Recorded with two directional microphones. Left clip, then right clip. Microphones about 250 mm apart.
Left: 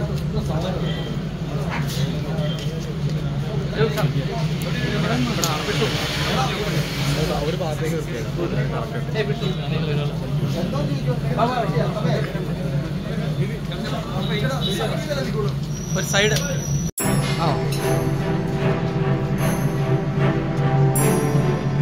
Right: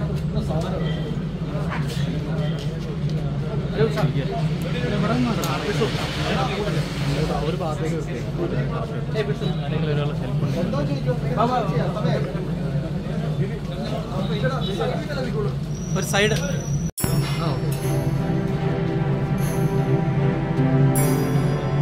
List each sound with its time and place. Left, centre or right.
16.1 s speech: right